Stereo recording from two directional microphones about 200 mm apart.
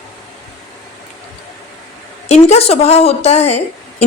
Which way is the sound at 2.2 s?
35° left (ahead or behind).